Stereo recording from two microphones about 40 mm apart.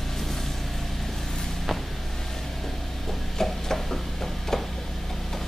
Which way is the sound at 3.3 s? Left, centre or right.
Centre.